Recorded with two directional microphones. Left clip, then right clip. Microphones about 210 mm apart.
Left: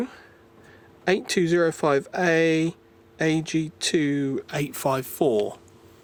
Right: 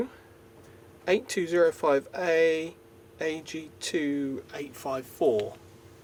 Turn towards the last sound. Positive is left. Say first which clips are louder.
# left 3 dB
turn(degrees=50)  # may be behind; listen again after turning